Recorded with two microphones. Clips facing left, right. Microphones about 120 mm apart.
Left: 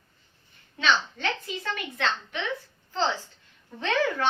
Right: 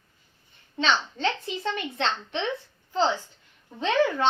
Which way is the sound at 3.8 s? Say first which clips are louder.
Right 3 dB; 20° right (ahead or behind).